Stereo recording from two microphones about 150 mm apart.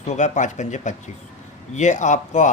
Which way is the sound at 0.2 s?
55° left (ahead or behind).